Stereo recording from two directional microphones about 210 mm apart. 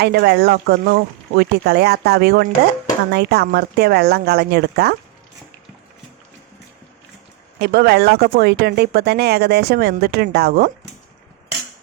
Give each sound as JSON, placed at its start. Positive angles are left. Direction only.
{"t": 0.0, "sound": "speech", "side_deg": -50}
{"t": 7.6, "sound": "speech", "side_deg": -50}